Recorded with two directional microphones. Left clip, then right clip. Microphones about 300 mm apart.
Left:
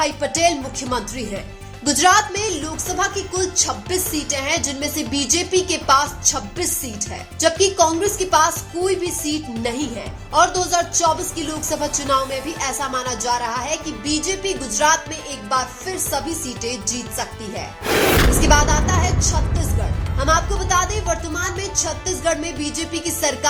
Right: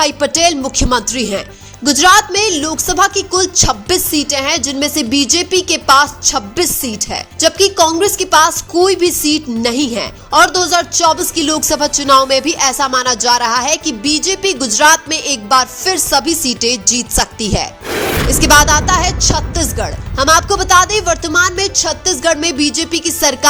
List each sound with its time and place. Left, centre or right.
0.0 s speech: right
17.8 s a sound: centre
18.3 s speech: right
20.1 s speech: right